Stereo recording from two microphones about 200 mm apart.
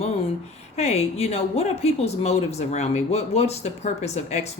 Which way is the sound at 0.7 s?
30° left (ahead or behind).